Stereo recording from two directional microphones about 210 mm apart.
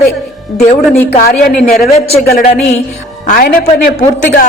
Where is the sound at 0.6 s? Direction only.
35° left (ahead or behind).